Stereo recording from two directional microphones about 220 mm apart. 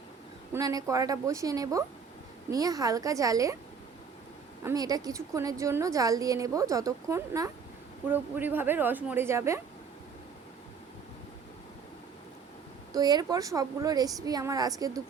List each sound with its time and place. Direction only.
0.5 s a woman's voice: 15° right (ahead or behind)
4.6 s a woman's voice: 15° right (ahead or behind)
12.9 s a woman's voice: 20° right (ahead or behind)